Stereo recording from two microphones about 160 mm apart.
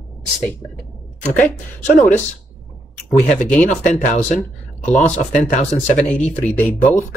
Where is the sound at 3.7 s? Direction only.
50° left (ahead or behind).